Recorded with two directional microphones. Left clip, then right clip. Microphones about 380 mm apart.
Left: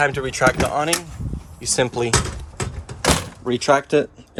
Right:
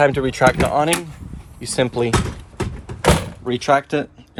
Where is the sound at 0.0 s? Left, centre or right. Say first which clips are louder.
Right 3 dB; centre.